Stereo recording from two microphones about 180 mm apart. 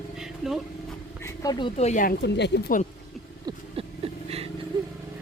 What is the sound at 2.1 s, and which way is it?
Speech, 70° left (ahead or behind).